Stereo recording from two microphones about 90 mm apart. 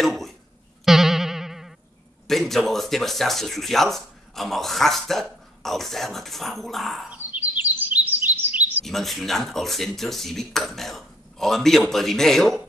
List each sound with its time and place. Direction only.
0.0 s speech: centre (ahead or behind)
0.8 s music: 5° right (ahead or behind)
2.2 s speech: 5° left (ahead or behind)
7.1 s chirp: 20° right (ahead or behind)
8.8 s speech: centre (ahead or behind)